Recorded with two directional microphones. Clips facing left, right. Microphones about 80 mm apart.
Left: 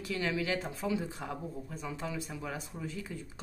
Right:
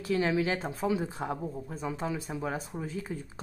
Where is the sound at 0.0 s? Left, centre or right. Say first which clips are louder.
Right 6 dB; right.